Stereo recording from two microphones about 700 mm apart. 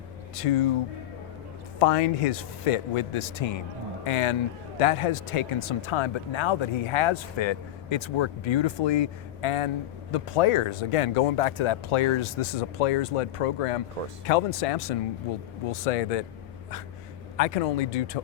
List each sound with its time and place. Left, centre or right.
0.3 s speech: left
1.8 s speech: left
17.3 s speech: left